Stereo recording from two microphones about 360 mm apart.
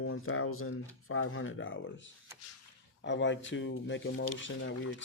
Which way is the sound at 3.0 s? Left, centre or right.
Left.